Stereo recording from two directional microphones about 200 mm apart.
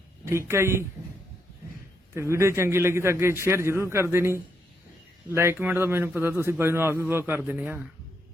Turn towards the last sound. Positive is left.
turn(degrees=-10)  # may be behind; listen again after turning